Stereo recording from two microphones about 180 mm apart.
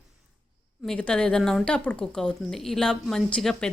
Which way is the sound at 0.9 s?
5° left (ahead or behind).